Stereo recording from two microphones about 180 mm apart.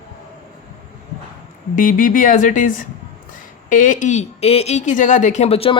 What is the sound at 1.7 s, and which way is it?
A woman's voice, 50° left (ahead or behind).